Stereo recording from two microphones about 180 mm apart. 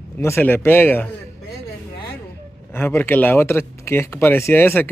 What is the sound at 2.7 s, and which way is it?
Speech, 10° left (ahead or behind).